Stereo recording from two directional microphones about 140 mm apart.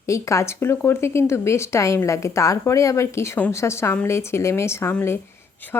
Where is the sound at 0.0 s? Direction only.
20° left (ahead or behind).